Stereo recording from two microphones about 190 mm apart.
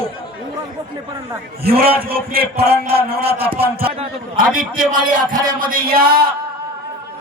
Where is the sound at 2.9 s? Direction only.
55° right (ahead or behind).